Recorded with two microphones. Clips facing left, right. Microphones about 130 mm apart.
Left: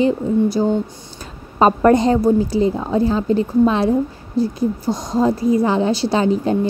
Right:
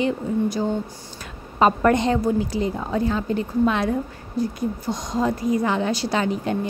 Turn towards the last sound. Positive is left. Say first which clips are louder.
# left 6 dB
turn(degrees=30)  # may be behind; listen again after turning